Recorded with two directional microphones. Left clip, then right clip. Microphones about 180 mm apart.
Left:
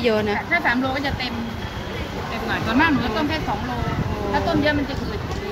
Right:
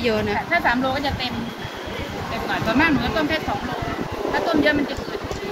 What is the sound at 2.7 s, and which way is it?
Speech, 25° left (ahead or behind).